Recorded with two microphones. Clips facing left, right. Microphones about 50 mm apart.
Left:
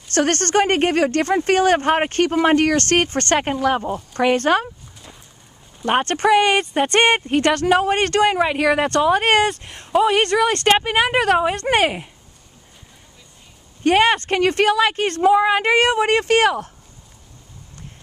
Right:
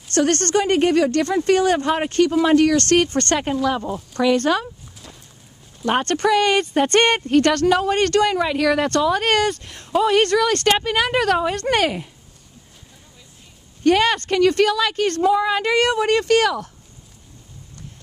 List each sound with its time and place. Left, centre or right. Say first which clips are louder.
0.1 s speech: even; left
5.9 s speech: left 2 dB; left
7.7 s speech: left 1 dB; left
13.8 s speech: left 1 dB; left